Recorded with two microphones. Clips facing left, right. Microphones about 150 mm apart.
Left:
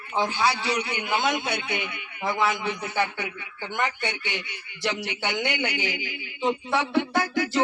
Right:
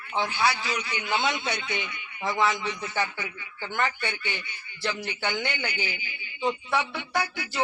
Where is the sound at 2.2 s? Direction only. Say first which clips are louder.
Left 1 dB; 5° left (ahead or behind).